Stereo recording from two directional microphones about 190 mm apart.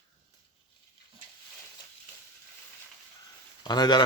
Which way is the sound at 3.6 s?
20° left (ahead or behind).